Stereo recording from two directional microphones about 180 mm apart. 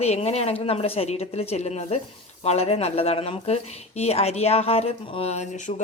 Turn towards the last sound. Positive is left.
turn(degrees=45)  # may be behind; listen again after turning